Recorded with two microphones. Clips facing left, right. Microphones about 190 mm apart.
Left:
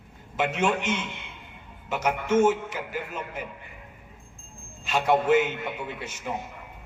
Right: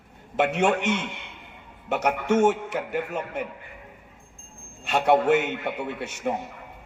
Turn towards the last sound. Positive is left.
turn(degrees=-65)  # may be behind; listen again after turning